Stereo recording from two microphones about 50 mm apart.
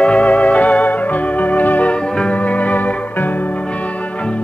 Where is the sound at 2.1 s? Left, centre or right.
Left.